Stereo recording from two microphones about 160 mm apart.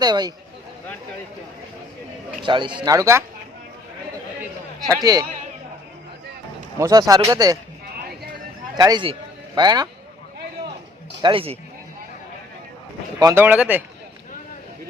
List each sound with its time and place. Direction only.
0.0 s speech: 25° right (ahead or behind)
2.4 s speech: 30° right (ahead or behind)
4.9 s speech: 20° right (ahead or behind)
6.7 s speech: 20° right (ahead or behind)
8.7 s speech: 25° right (ahead or behind)
11.2 s a man's voice: 35° right (ahead or behind)
13.1 s speech: 25° right (ahead or behind)
13.4 s speech: 10° right (ahead or behind)